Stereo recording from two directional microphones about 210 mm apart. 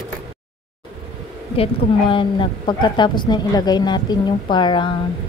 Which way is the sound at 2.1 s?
20° left (ahead or behind).